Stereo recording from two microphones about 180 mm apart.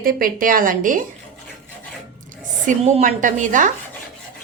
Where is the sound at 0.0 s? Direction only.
55° right (ahead or behind).